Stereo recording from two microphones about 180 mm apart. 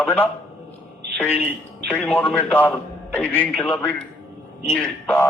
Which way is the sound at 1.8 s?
10° left (ahead or behind).